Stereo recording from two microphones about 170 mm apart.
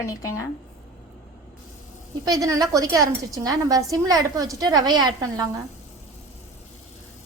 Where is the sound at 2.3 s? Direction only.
20° right (ahead or behind).